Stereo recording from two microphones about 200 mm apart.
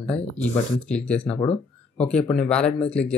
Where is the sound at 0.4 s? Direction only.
5° left (ahead or behind).